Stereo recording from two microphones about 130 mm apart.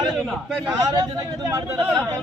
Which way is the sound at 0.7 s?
25° right (ahead or behind).